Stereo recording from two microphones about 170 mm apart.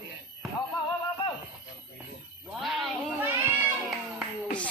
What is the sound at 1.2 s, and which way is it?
Music, 30° left (ahead or behind).